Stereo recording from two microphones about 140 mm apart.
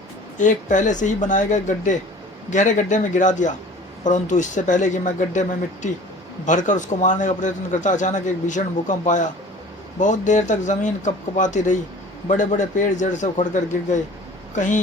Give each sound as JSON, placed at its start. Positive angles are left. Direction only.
{"t": 0.3, "sound": "a man's voice", "side_deg": 65}